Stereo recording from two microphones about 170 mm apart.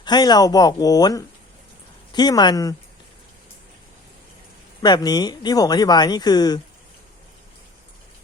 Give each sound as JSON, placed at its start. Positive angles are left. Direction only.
{"t": 0.0, "sound": "speech", "side_deg": 25}
{"t": 4.8, "sound": "speech", "side_deg": 25}